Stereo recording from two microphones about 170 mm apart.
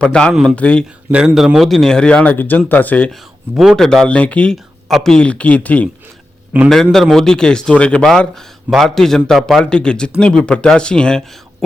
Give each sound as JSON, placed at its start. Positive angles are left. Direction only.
{"t": 0.0, "sound": "speech", "side_deg": 5}
{"t": 1.1, "sound": "speech", "side_deg": -5}
{"t": 3.5, "sound": "speech", "side_deg": 0}
{"t": 6.5, "sound": "speech", "side_deg": -5}